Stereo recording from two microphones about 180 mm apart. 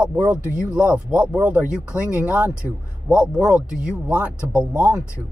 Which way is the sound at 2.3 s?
10° right (ahead or behind).